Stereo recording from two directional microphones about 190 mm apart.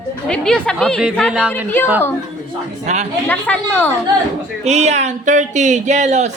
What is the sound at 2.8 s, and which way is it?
Speech, 40° right (ahead or behind).